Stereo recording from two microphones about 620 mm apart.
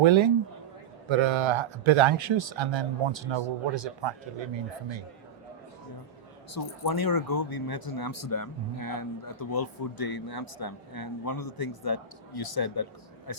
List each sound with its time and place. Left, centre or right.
0.0 s speech: right
6.5 s speech: left